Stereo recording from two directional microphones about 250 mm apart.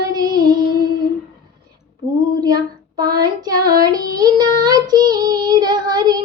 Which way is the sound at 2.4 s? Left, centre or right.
Centre.